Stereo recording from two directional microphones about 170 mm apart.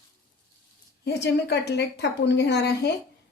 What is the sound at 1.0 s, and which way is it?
Speech, 75° left (ahead or behind).